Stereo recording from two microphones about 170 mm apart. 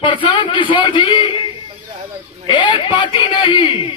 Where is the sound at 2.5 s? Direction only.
30° left (ahead or behind).